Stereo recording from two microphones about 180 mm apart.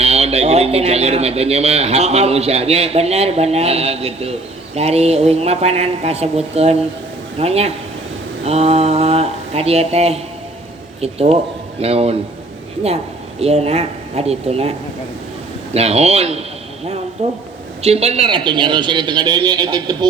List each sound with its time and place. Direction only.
0.0 s speech: 35° right (ahead or behind)
13.4 s speech: 35° right (ahead or behind)
15.7 s a man's voice: 35° right (ahead or behind)